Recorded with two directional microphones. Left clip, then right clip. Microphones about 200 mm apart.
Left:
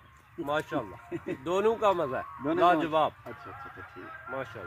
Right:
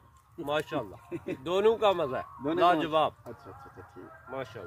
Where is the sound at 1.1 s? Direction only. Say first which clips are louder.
Left 1 dB; 40° right (ahead or behind).